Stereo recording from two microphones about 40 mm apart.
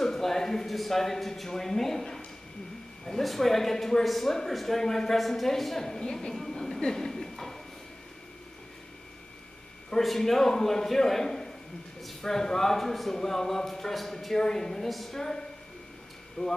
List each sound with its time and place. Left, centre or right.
0.0 s speech: centre
6.6 s a sound: centre
10.0 s speech: centre
14.9 s a woman's voice: centre
15.1 s speech: centre
16.4 s speech: left